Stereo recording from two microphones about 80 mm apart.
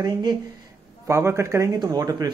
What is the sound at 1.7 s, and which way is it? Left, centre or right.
Speech, right.